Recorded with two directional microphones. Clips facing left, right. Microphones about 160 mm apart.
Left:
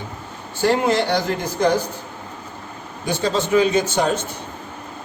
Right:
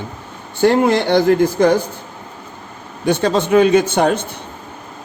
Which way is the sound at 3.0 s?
60° right (ahead or behind).